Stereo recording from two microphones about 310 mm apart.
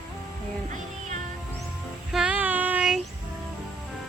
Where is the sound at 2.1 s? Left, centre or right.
Centre.